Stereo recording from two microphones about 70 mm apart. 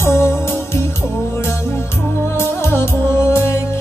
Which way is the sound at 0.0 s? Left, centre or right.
Left.